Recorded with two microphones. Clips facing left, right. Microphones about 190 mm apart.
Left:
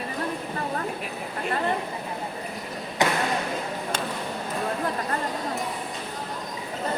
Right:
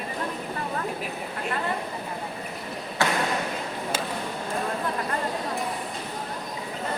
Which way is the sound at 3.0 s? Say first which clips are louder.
Left 2 dB; 20° left (ahead or behind).